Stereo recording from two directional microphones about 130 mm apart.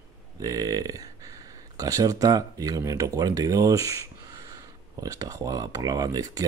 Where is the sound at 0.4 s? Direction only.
30° right (ahead or behind).